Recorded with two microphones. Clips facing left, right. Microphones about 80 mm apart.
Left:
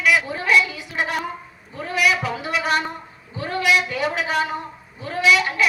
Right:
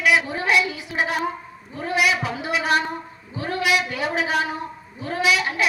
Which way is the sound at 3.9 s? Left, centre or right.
Right.